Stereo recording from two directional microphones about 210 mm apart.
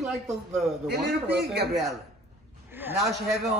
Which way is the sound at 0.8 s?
50° right (ahead or behind).